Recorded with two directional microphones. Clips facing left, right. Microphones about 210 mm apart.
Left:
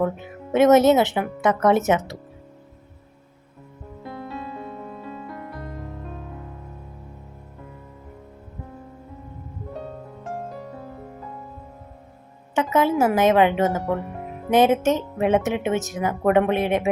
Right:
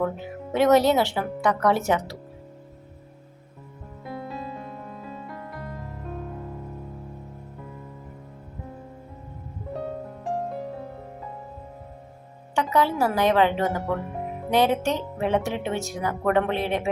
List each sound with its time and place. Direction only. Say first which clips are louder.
0.5 s speech: left 4 dB; 20° left (ahead or behind)
4.1 s music: even; centre (ahead or behind)
12.5 s speech: left 3 dB; 20° left (ahead or behind)